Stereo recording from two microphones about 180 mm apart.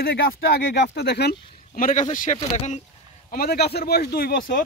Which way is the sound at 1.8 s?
50° left (ahead or behind).